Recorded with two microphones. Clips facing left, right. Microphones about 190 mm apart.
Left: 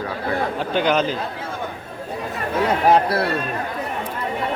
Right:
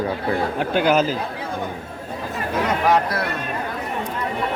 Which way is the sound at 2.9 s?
30° left (ahead or behind).